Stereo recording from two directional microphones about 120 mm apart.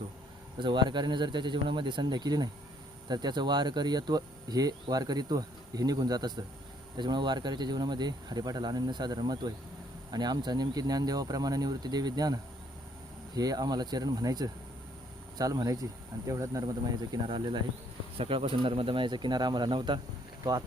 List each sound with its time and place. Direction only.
0.6 s speech: 40° right (ahead or behind)